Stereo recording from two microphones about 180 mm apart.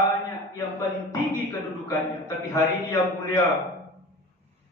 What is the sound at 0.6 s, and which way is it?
A man's voice, 15° left (ahead or behind).